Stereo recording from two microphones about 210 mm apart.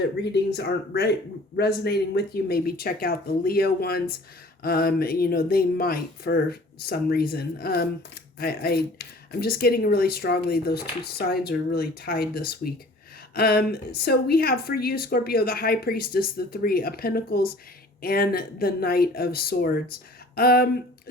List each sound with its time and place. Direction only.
0.2 s speech: 50° left (ahead or behind)